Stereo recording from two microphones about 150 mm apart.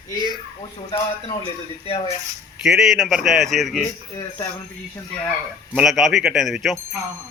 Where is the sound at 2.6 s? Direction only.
5° right (ahead or behind).